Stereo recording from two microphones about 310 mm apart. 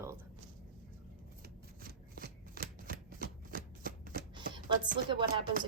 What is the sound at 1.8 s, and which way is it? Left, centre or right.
Shuffling cards, right.